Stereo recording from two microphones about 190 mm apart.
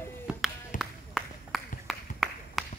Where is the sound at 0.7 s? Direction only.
Centre (ahead or behind).